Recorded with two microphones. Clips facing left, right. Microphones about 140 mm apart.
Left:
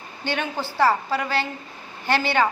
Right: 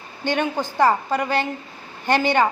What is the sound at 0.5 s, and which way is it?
Speech, 15° right (ahead or behind).